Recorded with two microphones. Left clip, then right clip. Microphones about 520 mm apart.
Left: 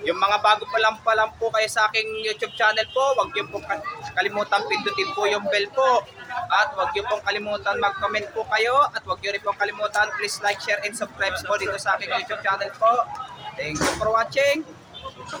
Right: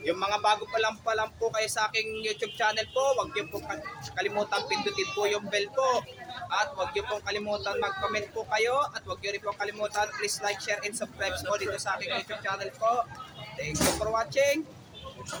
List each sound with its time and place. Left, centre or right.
0.0 s speech: right
14.1 s speech: right